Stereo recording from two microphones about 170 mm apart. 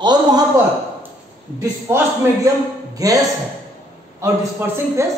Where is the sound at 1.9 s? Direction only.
15° right (ahead or behind).